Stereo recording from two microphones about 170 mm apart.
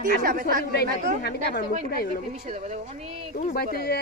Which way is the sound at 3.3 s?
60° left (ahead or behind).